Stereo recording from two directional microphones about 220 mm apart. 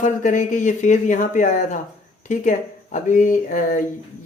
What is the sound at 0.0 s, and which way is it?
Speech, 35° left (ahead or behind).